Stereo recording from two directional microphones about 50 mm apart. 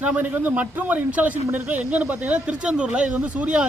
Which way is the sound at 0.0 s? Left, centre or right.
Right.